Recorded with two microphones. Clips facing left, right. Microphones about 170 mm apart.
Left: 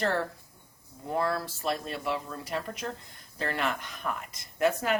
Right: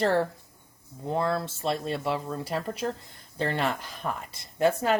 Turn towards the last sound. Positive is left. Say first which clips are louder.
# right 3 dB
turn(degrees=-30)  # may be behind; listen again after turning